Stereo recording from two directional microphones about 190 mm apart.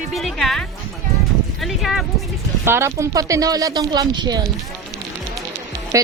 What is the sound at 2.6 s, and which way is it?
A woman's voice, 15° right (ahead or behind).